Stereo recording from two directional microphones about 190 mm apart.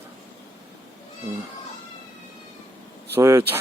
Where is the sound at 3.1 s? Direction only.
15° right (ahead or behind).